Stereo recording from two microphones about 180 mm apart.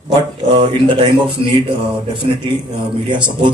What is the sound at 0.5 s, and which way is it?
Speech, 30° right (ahead or behind).